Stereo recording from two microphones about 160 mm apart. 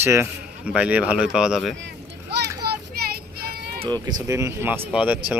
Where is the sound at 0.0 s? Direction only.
15° right (ahead or behind).